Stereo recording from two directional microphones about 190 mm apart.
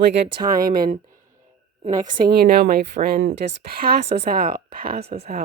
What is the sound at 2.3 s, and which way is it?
A woman's voice, 55° right (ahead or behind).